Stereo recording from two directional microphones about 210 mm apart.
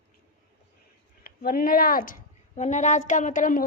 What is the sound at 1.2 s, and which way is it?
A woman's voice, 45° left (ahead or behind).